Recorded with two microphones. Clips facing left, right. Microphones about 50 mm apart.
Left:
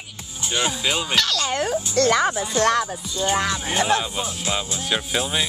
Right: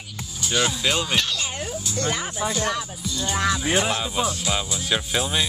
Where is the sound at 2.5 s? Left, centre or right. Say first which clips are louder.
Left 9 dB; left.